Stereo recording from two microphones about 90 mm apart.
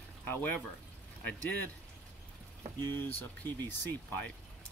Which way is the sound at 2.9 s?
25° left (ahead or behind).